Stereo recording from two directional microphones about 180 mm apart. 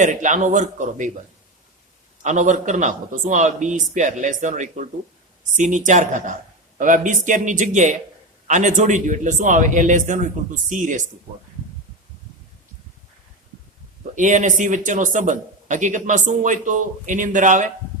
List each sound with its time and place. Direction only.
0.0 s speech: 45° right (ahead or behind)
2.2 s speech: 45° right (ahead or behind)
14.2 s speech: 45° right (ahead or behind)